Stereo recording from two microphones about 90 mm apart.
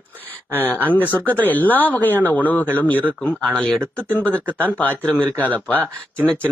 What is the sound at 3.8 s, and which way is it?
Speech, 25° right (ahead or behind).